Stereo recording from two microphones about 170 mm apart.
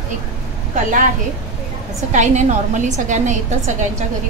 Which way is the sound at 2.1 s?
45° right (ahead or behind).